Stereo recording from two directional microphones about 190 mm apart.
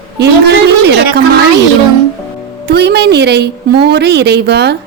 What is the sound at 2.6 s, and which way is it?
A woman's voice, 60° right (ahead or behind).